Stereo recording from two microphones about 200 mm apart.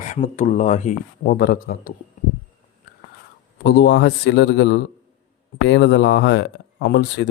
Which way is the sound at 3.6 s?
55° left (ahead or behind).